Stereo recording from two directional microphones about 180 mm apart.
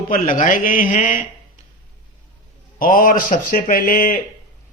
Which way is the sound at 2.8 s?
50° left (ahead or behind).